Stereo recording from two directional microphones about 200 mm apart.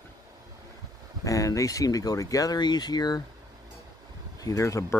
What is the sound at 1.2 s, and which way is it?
Speech, 15° left (ahead or behind).